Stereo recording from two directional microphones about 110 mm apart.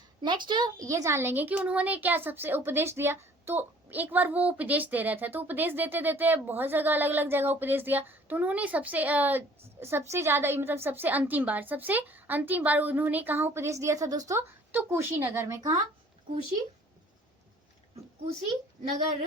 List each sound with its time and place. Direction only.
0.2 s a child's voice: 45° right (ahead or behind)
0.9 s speech: 30° right (ahead or behind)
14.7 s speech: 20° right (ahead or behind)